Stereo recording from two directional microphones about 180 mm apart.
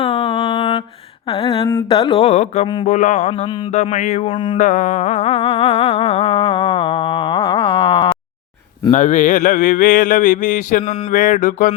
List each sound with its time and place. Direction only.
0.0 s a sound: 35° left (ahead or behind)
1.3 s music: 30° left (ahead or behind)
4.5 s music: 45° left (ahead or behind)
8.9 s speech: 40° left (ahead or behind)